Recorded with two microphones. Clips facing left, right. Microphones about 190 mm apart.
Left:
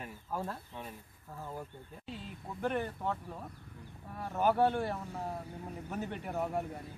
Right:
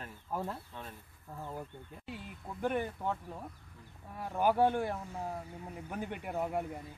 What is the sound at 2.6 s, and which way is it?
Speech, 10° right (ahead or behind).